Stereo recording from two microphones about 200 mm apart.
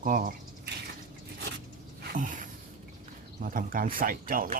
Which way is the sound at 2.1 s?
40° right (ahead or behind).